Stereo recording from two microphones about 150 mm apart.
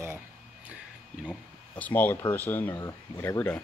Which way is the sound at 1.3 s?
10° left (ahead or behind).